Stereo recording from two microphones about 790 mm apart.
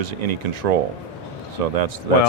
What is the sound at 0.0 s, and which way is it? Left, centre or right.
Speech, right.